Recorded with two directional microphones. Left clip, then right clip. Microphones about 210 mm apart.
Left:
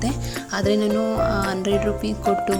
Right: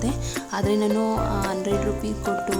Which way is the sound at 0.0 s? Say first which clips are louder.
Left 1 dB; 5° left (ahead or behind).